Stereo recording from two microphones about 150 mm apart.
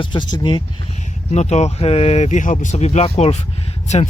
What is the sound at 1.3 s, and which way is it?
Speech, 50° left (ahead or behind).